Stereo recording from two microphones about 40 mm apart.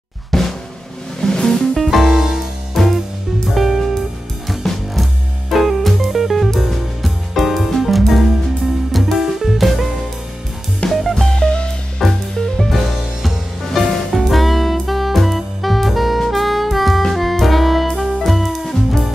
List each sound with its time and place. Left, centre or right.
0.3 s drum: centre
1.2 s music: centre
1.8 s music: centre
2.8 s music: centre
10.9 s music: centre
11.3 s music: left
12.0 s music: centre
14.2 s saxophone: centre
17.1 s music: centre